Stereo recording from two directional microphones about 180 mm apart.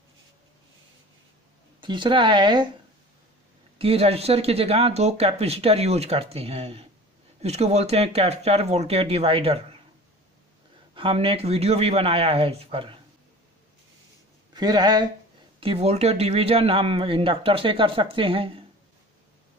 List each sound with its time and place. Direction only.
1.8 s speech: 25° right (ahead or behind)
3.7 s speech: 35° right (ahead or behind)
11.0 s speech: 30° right (ahead or behind)
14.5 s speech: 20° right (ahead or behind)
15.6 s speech: 35° right (ahead or behind)